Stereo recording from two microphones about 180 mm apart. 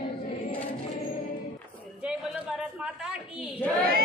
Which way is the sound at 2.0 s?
5° right (ahead or behind).